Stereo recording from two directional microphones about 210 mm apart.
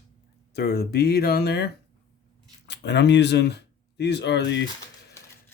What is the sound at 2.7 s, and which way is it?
Speech, 55° left (ahead or behind).